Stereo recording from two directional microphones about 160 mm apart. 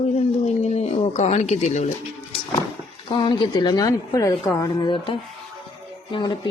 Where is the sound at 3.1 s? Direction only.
30° left (ahead or behind).